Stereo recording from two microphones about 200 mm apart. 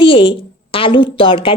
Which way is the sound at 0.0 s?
25° left (ahead or behind).